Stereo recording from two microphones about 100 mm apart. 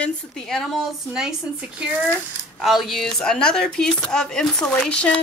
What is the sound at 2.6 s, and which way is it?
Speech, centre (ahead or behind).